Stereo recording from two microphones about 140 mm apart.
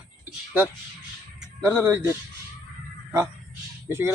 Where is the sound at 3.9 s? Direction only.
15° right (ahead or behind).